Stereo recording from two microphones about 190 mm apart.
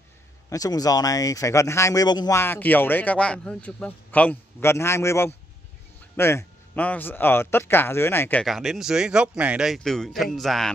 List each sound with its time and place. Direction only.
0.5 s speech: 20° left (ahead or behind); by 10.7 s centre (ahead or behind)